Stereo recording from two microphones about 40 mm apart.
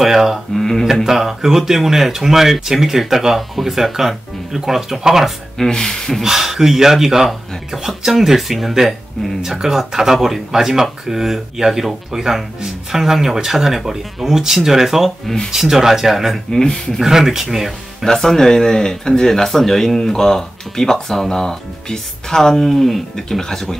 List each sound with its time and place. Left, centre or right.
0.0 s speech: centre
0.6 s speech: centre
1.0 s speech: centre
5.6 s speech: centre
6.2 s speech: centre
15.2 s speech: centre
15.5 s speech: centre
16.5 s speech: centre
17.0 s speech: centre
18.0 s speech: centre